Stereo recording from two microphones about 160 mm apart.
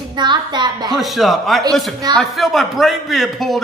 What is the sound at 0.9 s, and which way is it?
A man's voice, centre (ahead or behind).